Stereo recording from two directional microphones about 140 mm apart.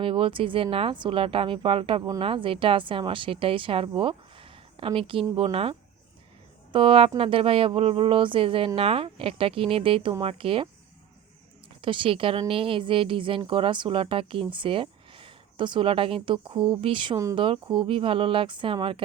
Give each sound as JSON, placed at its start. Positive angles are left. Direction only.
{"t": 0.0, "sound": "a woman's voice", "side_deg": -40}
{"t": 6.7, "sound": "a woman's voice", "side_deg": -40}
{"t": 11.8, "sound": "a woman's voice", "side_deg": -40}